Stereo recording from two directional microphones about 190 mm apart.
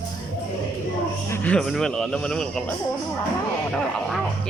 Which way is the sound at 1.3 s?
5° left (ahead or behind).